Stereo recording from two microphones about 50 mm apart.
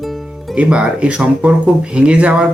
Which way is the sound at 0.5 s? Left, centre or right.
Right.